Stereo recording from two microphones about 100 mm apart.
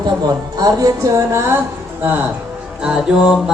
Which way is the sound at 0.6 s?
35° right (ahead or behind).